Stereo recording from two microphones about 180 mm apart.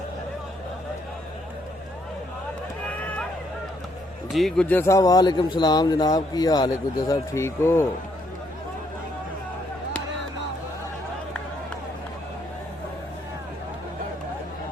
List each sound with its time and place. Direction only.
4.3 s speech: centre (ahead or behind)